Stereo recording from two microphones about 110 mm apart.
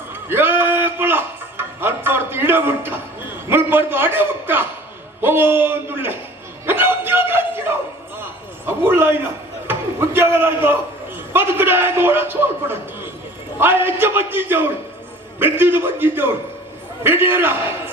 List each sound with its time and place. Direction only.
0.1 s music: 20° right (ahead or behind)
5.2 s a man's voice: 20° right (ahead or behind)
6.7 s a sound: 20° right (ahead or behind)
9.6 s a man's voice: 20° right (ahead or behind)